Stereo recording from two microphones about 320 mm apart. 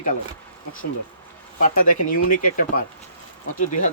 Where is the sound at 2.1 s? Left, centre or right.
Left.